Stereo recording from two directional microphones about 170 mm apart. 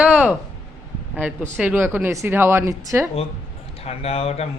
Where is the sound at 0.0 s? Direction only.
5° right (ahead or behind).